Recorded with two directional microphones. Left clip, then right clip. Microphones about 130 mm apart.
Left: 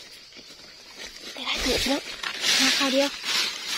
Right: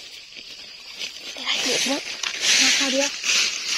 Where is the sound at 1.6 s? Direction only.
90° left.